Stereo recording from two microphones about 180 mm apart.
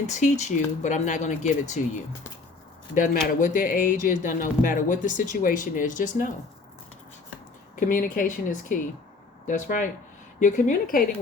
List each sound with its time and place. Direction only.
0.1 s speech: 40° left (ahead or behind)
2.9 s speech: 45° left (ahead or behind)
7.8 s speech: 45° left (ahead or behind)